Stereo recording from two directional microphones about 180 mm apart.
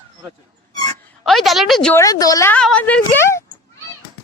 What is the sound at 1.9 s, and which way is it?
Speech, 20° left (ahead or behind).